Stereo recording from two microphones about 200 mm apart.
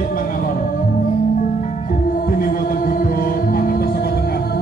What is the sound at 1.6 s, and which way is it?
Music, 45° left (ahead or behind).